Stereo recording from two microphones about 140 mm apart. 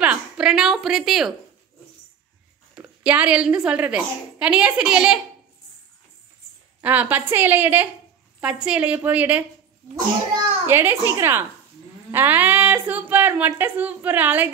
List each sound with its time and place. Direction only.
0.0 s a woman's voice: 5° right (ahead or behind)
2.7 s a woman's voice: 10° right (ahead or behind)
6.8 s a woman's voice: 10° right (ahead or behind)
10.7 s a woman's voice: 15° right (ahead or behind)